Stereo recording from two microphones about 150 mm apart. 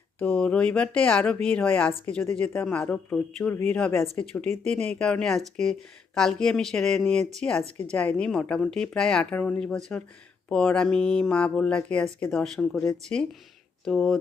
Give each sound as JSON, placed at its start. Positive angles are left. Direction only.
{"t": 0.2, "sound": "speech", "side_deg": 10}
{"t": 4.4, "sound": "speech", "side_deg": -45}
{"t": 4.7, "sound": "a woman's voice", "side_deg": 5}
{"t": 13.8, "sound": "a woman's voice", "side_deg": 5}